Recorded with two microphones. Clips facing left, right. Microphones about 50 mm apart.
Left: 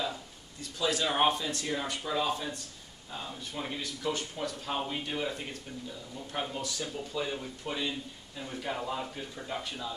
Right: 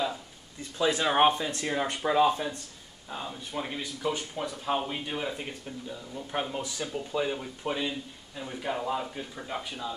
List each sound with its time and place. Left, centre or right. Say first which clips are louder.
0.6 s speech: right 4 dB; right
3.1 s speech: right 3 dB; centre